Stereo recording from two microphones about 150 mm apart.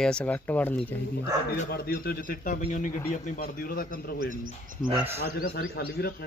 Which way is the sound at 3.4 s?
75° left (ahead or behind).